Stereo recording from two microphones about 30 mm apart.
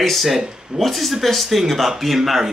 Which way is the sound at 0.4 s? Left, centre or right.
Right.